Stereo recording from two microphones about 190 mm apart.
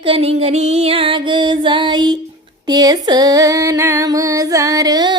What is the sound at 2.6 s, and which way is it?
Female singing, 20° right (ahead or behind).